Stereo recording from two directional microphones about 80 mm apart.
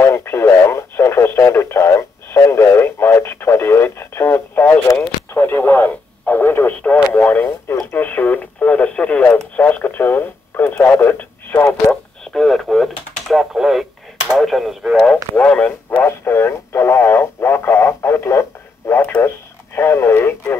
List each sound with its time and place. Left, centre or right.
0.0 s radio: left
12.3 s radio: centre
15.4 s radio: centre
16.0 s radio: left